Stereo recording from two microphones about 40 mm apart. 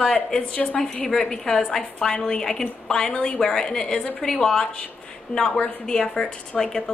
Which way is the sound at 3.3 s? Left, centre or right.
Centre.